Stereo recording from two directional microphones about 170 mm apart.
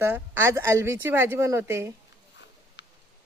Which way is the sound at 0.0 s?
15° right (ahead or behind).